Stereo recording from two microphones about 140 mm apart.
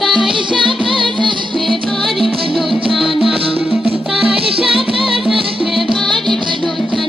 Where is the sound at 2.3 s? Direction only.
40° right (ahead or behind).